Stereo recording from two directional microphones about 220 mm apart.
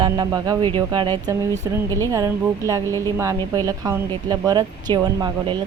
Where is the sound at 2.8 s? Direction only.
10° left (ahead or behind).